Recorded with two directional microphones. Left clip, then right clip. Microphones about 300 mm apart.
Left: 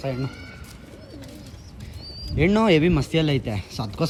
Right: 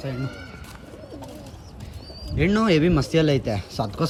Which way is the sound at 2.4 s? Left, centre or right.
Left.